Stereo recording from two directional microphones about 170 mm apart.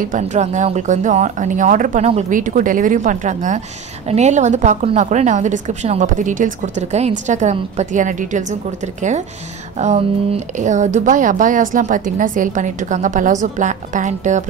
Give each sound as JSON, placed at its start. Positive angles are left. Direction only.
{"t": 0.0, "sound": "a woman's voice", "side_deg": -45}